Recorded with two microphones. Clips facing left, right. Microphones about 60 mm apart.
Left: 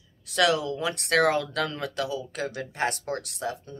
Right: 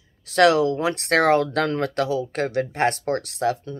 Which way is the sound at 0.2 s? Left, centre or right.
Right.